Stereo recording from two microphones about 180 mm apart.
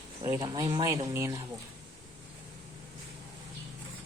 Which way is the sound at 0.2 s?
20° right (ahead or behind).